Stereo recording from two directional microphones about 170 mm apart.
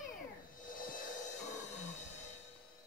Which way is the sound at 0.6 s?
55° left (ahead or behind).